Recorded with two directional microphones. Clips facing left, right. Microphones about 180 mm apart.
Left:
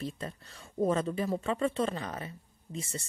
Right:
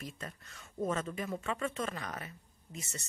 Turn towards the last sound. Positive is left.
turn(degrees=30)  # may be behind; listen again after turning